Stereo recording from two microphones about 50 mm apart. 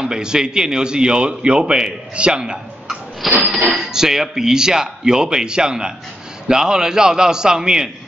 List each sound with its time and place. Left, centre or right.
0.0 s a man's voice: centre